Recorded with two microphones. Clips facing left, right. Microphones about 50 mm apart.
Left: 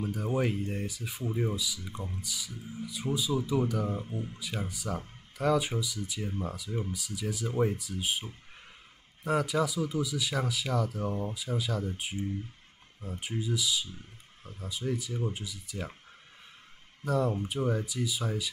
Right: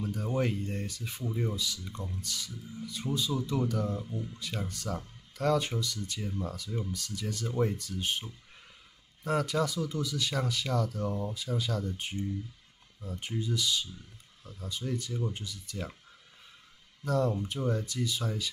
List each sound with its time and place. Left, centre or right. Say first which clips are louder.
0.0 s speech: left 1 dB; centre
3.9 s speech: left 1 dB; left
4.3 s speech: left 1 dB; centre
17.0 s speech: even; centre